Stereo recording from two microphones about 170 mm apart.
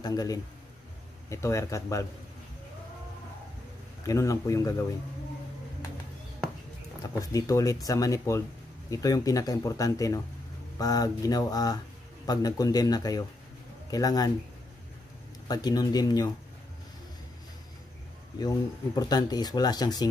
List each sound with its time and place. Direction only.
0.0 s speech: 20° left (ahead or behind)
4.0 s speech: 20° left (ahead or behind)
7.0 s a man's voice: 20° left (ahead or behind)
15.4 s speech: 25° left (ahead or behind)
18.9 s speech: 25° left (ahead or behind)